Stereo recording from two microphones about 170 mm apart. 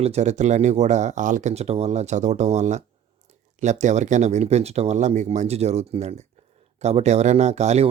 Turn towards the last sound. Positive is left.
turn(degrees=-40)  # may be behind; listen again after turning